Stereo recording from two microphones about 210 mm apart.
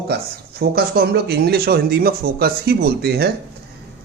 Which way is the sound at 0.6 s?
45° right (ahead or behind).